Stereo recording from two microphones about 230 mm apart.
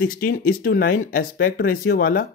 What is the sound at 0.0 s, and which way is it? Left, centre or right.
Speech, left.